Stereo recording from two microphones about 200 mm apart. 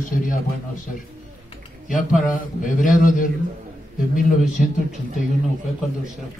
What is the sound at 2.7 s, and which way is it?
Speech, 40° left (ahead or behind).